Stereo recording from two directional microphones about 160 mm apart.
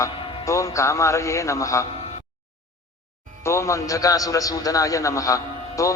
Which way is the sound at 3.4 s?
20° left (ahead or behind).